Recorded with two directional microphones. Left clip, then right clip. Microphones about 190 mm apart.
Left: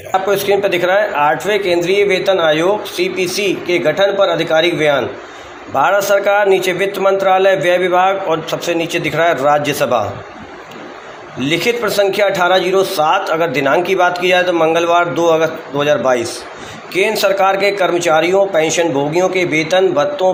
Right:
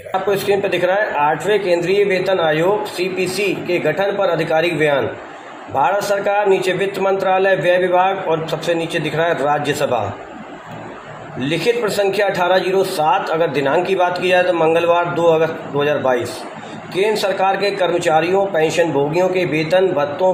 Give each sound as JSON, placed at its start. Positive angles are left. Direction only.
{"t": 0.1, "sound": "a man's voice", "side_deg": 25}
{"t": 11.3, "sound": "a man's voice", "side_deg": 25}